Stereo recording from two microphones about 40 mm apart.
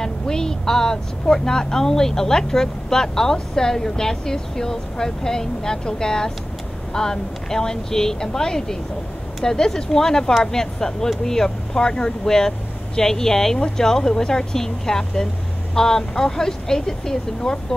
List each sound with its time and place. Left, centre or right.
0.0 s speech: centre